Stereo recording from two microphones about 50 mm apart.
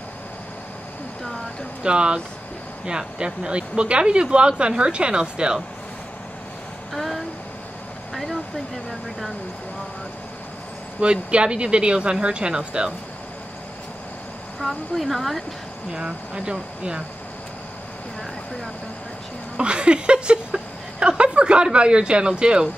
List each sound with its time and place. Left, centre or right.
1.8 s speech: right
6.9 s a sound: centre
8.1 s vehicle: centre
11.0 s speech: right
14.6 s speech: centre
15.9 s speech: centre
19.5 s a sound: right